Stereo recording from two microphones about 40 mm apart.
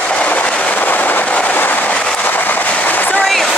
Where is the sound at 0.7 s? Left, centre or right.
Left.